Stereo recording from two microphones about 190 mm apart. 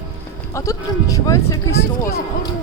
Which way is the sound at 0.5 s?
15° left (ahead or behind).